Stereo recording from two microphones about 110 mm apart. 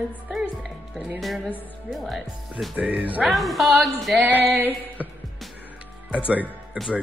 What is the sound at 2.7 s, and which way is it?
Speech, 15° right (ahead or behind).